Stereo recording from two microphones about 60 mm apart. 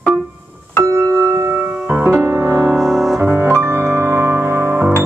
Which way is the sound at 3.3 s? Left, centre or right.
Right.